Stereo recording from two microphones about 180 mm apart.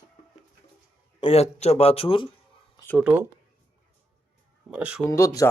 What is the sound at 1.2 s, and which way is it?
Speech, 35° left (ahead or behind).